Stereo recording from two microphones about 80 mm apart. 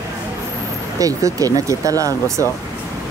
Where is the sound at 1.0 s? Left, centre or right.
Right.